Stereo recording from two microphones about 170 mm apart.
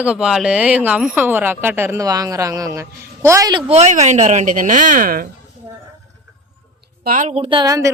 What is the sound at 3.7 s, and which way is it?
Speech, 40° right (ahead or behind).